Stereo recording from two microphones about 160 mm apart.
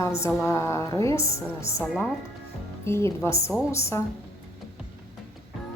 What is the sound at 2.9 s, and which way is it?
Speech, 15° left (ahead or behind).